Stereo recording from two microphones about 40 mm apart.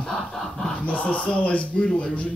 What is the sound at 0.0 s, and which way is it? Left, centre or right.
Snicker, centre.